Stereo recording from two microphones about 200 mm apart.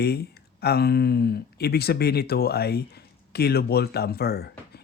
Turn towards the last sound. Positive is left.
turn(degrees=50)  # may be behind; listen again after turning